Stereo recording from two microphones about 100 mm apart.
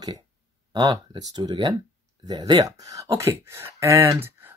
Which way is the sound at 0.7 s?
45° right (ahead or behind).